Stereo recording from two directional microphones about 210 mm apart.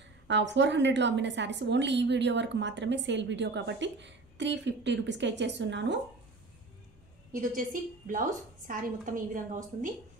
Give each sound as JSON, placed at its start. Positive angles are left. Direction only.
{"t": 0.0, "sound": "a woman's voice", "side_deg": -60}
{"t": 7.3, "sound": "a woman's voice", "side_deg": -40}